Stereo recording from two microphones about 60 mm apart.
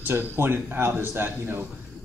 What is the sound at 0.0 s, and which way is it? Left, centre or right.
A man's voice, right.